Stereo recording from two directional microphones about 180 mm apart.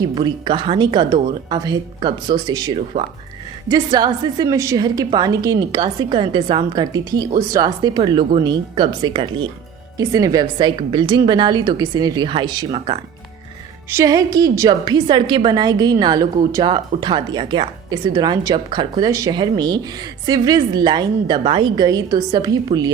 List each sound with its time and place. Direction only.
0.0 s a woman's voice: 25° right (ahead or behind)